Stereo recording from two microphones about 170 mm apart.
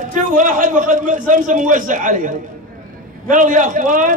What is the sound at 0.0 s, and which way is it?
A man's voice, 50° right (ahead or behind).